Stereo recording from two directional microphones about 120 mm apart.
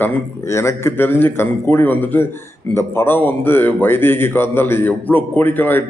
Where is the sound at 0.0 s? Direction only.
25° left (ahead or behind).